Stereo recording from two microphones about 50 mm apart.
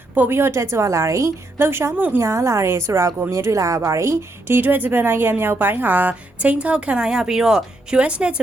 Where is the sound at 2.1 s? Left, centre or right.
Right.